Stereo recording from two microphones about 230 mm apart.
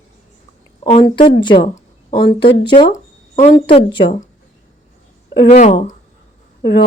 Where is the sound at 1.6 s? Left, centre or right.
Left.